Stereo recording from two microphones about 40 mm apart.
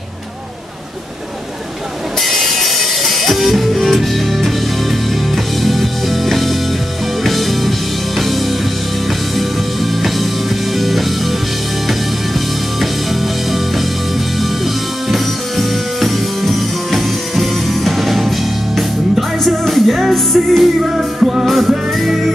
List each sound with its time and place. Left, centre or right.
2.2 s music: centre
10.0 s music: centre
13.1 s music: centre
21.5 s music: centre